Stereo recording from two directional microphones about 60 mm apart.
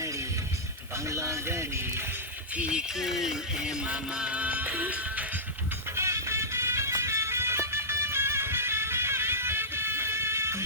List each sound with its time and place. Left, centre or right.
1.1 s speech: right
3.0 s speech: centre
3.8 s music: centre
6.0 s music: right